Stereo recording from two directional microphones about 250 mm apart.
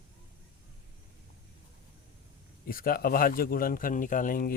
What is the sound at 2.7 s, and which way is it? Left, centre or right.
Speech, left.